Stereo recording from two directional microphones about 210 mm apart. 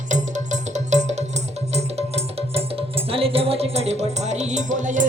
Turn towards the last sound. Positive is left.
turn(degrees=-35)  # may be behind; listen again after turning